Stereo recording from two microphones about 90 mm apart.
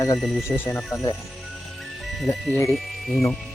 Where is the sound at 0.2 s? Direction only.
Centre (ahead or behind).